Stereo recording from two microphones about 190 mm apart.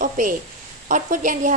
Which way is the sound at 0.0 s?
45° right (ahead or behind).